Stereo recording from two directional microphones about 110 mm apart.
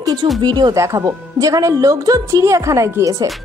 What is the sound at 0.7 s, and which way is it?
Speech, 25° right (ahead or behind).